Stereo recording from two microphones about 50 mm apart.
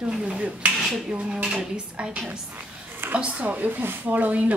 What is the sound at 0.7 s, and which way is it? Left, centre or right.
A woman's voice, centre.